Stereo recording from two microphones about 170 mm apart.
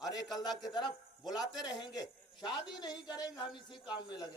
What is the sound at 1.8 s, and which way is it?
Speech, 25° left (ahead or behind).